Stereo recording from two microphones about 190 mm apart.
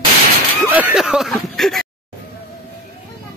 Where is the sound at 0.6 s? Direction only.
10° right (ahead or behind).